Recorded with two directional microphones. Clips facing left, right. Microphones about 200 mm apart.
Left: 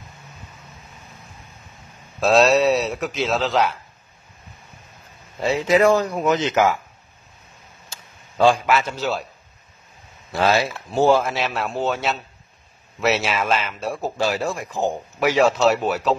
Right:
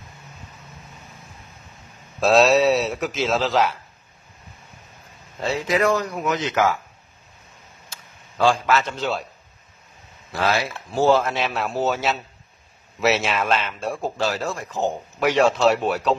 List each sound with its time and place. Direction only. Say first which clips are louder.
2.1 s speech: even; centre (ahead or behind)
5.7 s speech: left 5 dB; 30° left (ahead or behind)
8.4 s a man's voice: left 2 dB; 15° left (ahead or behind)
10.6 s speech: left 2 dB; 15° left (ahead or behind)